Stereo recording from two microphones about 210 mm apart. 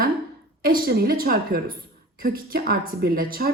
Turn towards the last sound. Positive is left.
turn(degrees=-45)  # may be behind; listen again after turning